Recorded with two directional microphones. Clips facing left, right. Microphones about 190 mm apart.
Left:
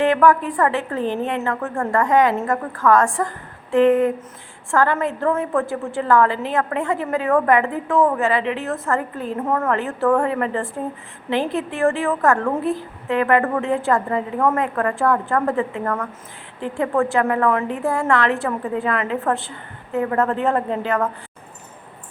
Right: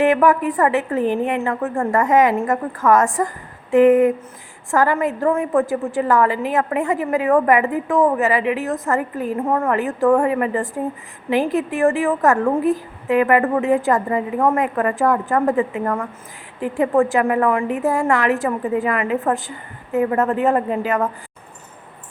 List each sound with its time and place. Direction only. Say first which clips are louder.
0.1 s a woman's voice: right 1 dB; 20° right (ahead or behind); by 20.1 s 5° right (ahead or behind)
20.1 s a woman's voice: even; 15° right (ahead or behind)